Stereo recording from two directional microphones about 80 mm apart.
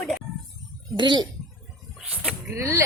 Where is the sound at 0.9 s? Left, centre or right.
Right.